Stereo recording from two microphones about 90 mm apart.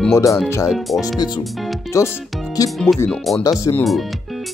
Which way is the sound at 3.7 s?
50° left (ahead or behind).